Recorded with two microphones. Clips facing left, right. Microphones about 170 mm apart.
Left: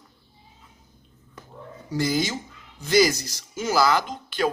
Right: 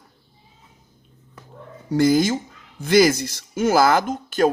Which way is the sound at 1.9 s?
50° right (ahead or behind).